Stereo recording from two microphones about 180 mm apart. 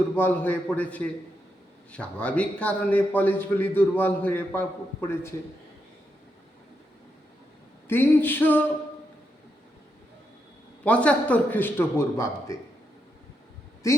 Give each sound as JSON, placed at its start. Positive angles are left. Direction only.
{"t": 0.2, "sound": "a man's voice", "side_deg": 10}
{"t": 7.9, "sound": "a man's voice", "side_deg": 10}
{"t": 10.8, "sound": "a man's voice", "side_deg": 5}
{"t": 13.8, "sound": "speech", "side_deg": 15}